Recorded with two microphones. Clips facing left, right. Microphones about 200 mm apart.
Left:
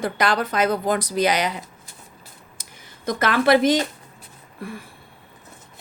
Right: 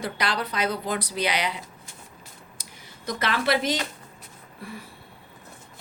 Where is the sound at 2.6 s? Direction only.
50° left (ahead or behind).